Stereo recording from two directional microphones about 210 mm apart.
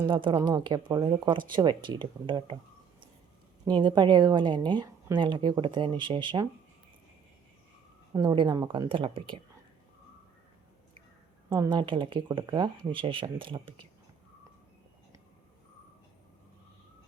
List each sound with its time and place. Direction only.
0.0 s a woman's voice: 20° right (ahead or behind)
3.7 s a woman's voice: 20° right (ahead or behind)
8.1 s a woman's voice: 20° right (ahead or behind)
11.4 s a woman's voice: 20° right (ahead or behind)